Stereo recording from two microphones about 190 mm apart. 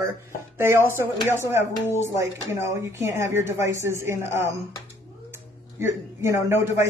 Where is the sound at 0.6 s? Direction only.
10° right (ahead or behind).